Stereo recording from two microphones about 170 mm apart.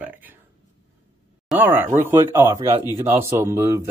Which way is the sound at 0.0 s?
10° right (ahead or behind).